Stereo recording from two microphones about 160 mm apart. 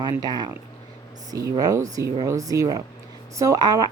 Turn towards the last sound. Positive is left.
turn(degrees=-25)  # may be behind; listen again after turning